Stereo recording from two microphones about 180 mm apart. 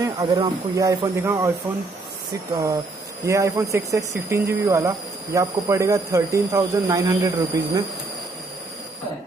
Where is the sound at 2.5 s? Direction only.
20° right (ahead or behind).